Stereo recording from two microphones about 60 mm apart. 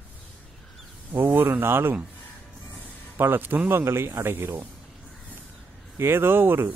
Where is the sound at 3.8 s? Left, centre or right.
Right.